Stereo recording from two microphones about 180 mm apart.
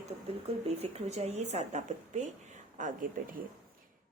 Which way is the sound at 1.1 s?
35° right (ahead or behind).